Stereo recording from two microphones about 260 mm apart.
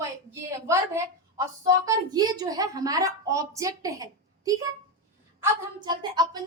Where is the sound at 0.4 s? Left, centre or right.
Centre.